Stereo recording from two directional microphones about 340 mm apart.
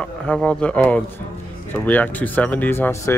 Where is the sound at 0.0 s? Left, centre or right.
Centre.